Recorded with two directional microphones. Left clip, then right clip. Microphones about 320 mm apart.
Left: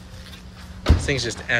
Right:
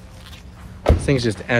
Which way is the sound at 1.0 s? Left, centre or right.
Centre.